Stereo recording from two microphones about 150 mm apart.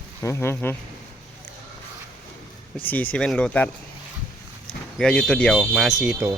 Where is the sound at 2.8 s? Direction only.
10° left (ahead or behind).